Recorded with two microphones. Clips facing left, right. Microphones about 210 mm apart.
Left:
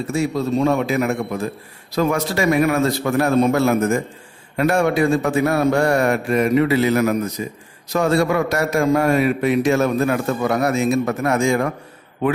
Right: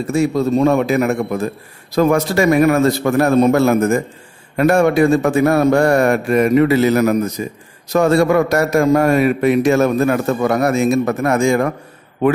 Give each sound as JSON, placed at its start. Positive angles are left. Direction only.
{"t": 0.1, "sound": "a man's voice", "side_deg": -50}